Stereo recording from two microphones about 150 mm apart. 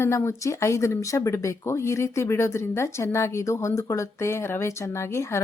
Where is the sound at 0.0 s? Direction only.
20° left (ahead or behind).